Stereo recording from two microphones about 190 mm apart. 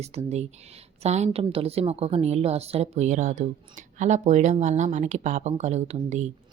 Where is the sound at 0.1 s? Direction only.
35° right (ahead or behind).